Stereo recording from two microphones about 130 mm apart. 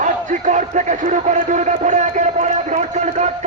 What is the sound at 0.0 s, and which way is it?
A man's voice, 75° right (ahead or behind).